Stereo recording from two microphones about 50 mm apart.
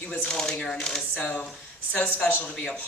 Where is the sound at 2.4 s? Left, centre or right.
Centre.